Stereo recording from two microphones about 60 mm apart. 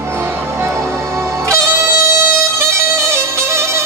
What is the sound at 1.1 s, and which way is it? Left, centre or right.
Music, right.